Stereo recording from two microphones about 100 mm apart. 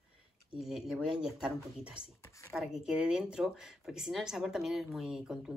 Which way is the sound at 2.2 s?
30° left (ahead or behind).